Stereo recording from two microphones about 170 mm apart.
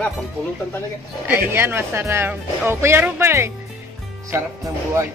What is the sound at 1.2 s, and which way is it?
A woman's voice, 10° right (ahead or behind).